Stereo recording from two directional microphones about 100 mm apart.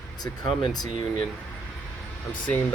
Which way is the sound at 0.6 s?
40° left (ahead or behind).